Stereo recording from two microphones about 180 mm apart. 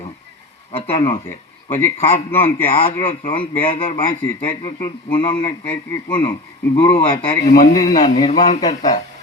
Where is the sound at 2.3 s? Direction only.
10° left (ahead or behind).